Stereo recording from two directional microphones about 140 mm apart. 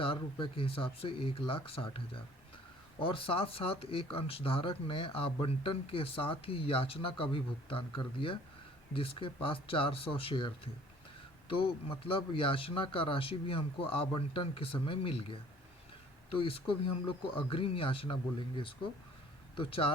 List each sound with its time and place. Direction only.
0.0 s speech: 35° left (ahead or behind)
16.4 s speech: 40° left (ahead or behind)